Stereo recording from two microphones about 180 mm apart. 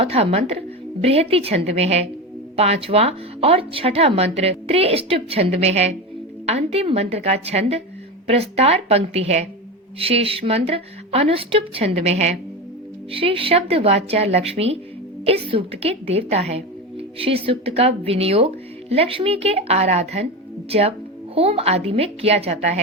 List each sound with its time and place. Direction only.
0.0 s a woman's voice: 35° right (ahead or behind)